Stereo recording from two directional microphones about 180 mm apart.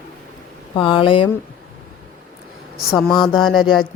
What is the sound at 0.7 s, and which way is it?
Speech, 30° left (ahead or behind).